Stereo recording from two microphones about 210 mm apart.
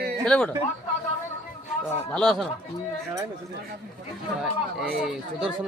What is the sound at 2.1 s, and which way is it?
Speech, centre (ahead or behind).